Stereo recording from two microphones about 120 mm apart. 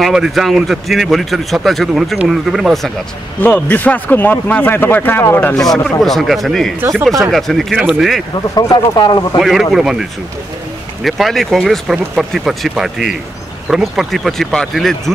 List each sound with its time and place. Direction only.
0.0 s speech: centre (ahead or behind)
3.3 s speech: 15° left (ahead or behind)
5.5 s speech: 5° left (ahead or behind)
8.4 s speech: 35° left (ahead or behind)
9.4 s speech: centre (ahead or behind)
11.1 s speech: centre (ahead or behind)